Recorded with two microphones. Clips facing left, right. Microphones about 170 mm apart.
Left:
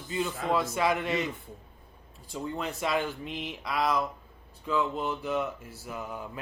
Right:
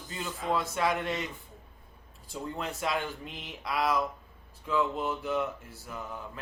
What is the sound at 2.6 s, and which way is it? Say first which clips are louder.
A man's voice: left 2 dB; centre (ahead or behind).